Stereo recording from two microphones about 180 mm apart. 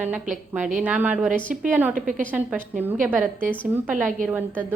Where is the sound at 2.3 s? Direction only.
10° right (ahead or behind).